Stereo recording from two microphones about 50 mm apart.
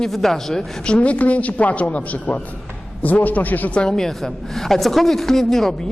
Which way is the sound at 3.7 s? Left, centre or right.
Centre.